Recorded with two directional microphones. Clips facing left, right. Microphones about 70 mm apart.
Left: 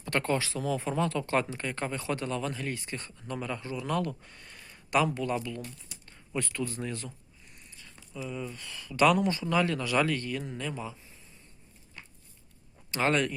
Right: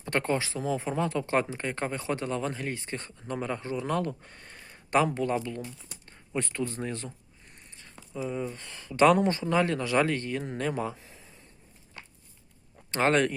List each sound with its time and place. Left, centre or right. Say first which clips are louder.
0.0 s speech: right 1 dB; right
10.4 s speech: right 6 dB; right
12.9 s speech: right 3 dB; right